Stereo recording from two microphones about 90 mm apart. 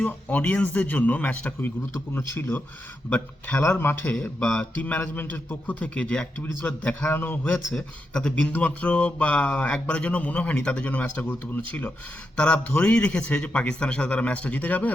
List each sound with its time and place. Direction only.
0.0 s speech: 20° left (ahead or behind)
3.1 s speech: 15° left (ahead or behind)
3.6 s speech: 25° left (ahead or behind)
4.2 s speech: 10° left (ahead or behind)
7.7 s speech: 10° left (ahead or behind)